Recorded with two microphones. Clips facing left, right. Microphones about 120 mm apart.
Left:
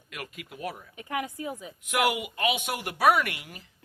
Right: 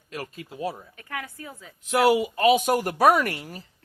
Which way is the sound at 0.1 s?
30° right (ahead or behind).